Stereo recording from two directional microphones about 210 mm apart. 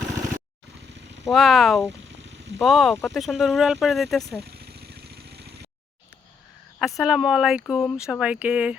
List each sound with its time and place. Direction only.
1.2 s speech: centre (ahead or behind)
4.4 s vehicle: 50° right (ahead or behind)
6.7 s speech: centre (ahead or behind)